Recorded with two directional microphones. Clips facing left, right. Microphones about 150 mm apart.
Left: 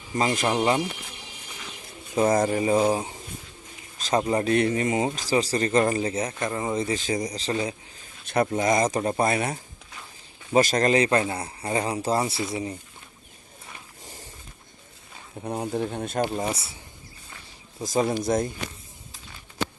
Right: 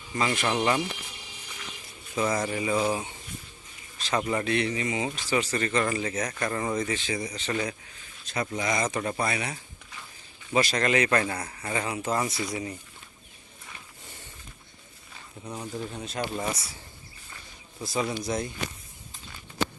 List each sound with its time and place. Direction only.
0.3 s speech: 30° left (ahead or behind)
2.1 s speech: 45° left (ahead or behind); by 6.8 s 20° left (ahead or behind)
6.8 s speech: 40° left (ahead or behind)
8.2 s a sound: 60° left (ahead or behind)
8.4 s speech: 45° left (ahead or behind); by 12.7 s 25° left (ahead or behind)
14.0 s a sound: 40° left (ahead or behind)
15.4 s speech: 55° left (ahead or behind)
16.3 s speech: 25° left (ahead or behind)
18.1 s speech: 45° left (ahead or behind)